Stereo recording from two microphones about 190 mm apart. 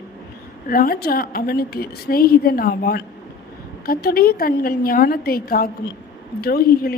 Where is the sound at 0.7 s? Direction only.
50° left (ahead or behind).